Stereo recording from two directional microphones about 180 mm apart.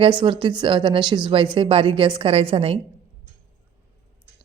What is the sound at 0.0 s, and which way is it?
A woman's voice, 25° right (ahead or behind).